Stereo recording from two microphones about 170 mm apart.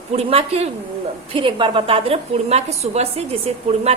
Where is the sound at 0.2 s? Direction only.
35° right (ahead or behind).